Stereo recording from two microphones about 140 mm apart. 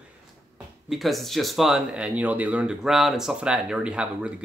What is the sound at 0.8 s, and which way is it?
Speech, centre (ahead or behind).